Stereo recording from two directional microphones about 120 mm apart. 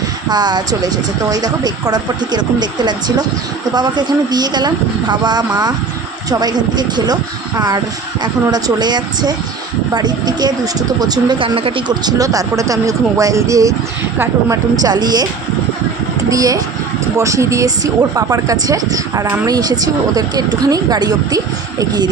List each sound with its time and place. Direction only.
0.3 s speech: 35° right (ahead or behind)
8.2 s speech: 35° right (ahead or behind)
12.0 s speech: 30° right (ahead or behind)
16.3 s speech: 30° right (ahead or behind)